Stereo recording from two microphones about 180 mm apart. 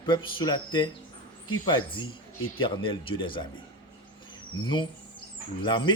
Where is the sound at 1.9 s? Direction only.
25° left (ahead or behind).